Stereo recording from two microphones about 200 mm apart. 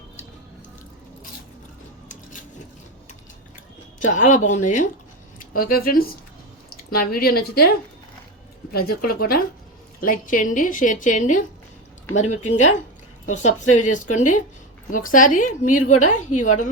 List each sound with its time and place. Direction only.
4.0 s a woman's voice: 40° left (ahead or behind)
8.7 s a woman's voice: 50° left (ahead or behind)